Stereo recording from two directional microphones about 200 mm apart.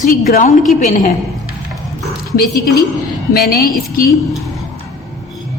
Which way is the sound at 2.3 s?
50° left (ahead or behind).